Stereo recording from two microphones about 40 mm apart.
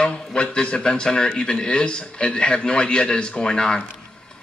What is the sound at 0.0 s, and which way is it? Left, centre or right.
A man's voice, left.